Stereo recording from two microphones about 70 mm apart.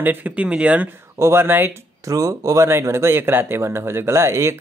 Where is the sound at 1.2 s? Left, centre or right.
Right.